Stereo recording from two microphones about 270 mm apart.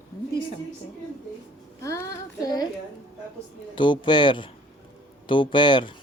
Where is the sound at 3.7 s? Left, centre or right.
Centre.